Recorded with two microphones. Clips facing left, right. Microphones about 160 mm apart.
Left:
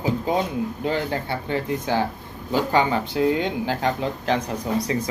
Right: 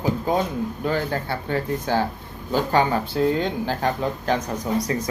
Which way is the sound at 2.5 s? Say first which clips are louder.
Even; 50° right (ahead or behind).